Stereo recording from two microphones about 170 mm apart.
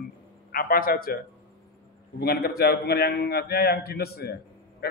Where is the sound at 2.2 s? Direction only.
65° left (ahead or behind).